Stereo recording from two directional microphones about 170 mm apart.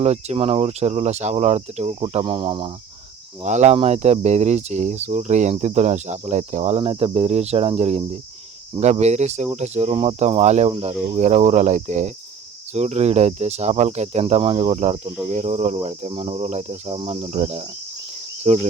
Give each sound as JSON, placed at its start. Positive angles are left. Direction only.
{"t": 0.0, "sound": "cricket", "side_deg": -40}
{"t": 3.4, "sound": "cricket", "side_deg": -45}